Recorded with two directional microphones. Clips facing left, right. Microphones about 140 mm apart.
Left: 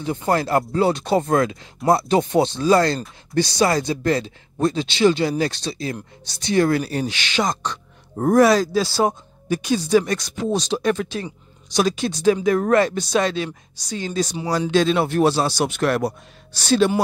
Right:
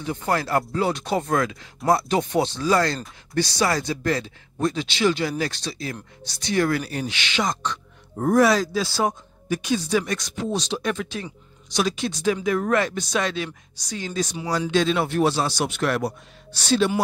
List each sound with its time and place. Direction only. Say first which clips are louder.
0.3 s speech: left 3 dB; 25° left (ahead or behind); by 16.9 s 45° left (ahead or behind)